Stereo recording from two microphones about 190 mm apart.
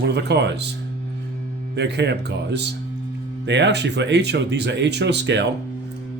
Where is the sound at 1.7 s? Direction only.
65° right (ahead or behind).